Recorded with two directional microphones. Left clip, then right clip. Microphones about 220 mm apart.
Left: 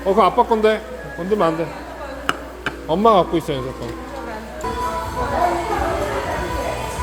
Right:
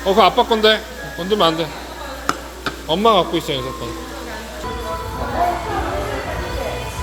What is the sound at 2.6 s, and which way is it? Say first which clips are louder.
Speech: even; 15° left (ahead or behind).